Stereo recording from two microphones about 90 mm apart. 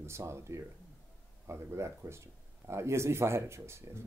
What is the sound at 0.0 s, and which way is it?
A man's voice, 30° right (ahead or behind).